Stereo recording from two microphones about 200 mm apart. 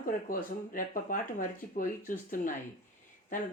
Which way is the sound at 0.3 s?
45° left (ahead or behind).